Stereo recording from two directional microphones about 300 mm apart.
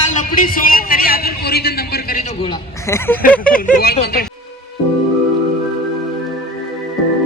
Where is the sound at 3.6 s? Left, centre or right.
Left.